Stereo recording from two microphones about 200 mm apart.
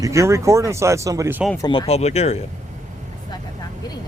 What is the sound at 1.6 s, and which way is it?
Speech, 25° left (ahead or behind).